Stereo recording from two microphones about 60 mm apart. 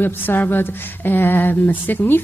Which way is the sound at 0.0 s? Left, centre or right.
Left.